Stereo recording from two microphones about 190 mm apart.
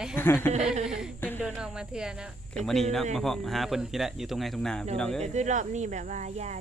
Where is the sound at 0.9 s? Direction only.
5° right (ahead or behind).